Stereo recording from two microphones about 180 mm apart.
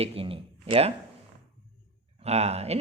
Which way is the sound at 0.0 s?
30° right (ahead or behind).